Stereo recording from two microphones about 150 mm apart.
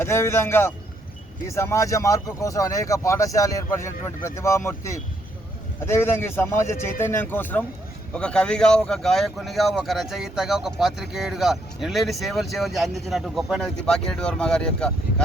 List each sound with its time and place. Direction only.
0.0 s speech: 15° left (ahead or behind)